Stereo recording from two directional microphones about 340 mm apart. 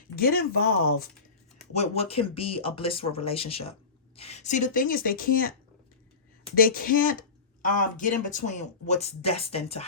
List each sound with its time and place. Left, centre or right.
0.2 s speech: left